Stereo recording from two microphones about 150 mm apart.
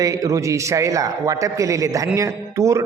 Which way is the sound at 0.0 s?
25° right (ahead or behind).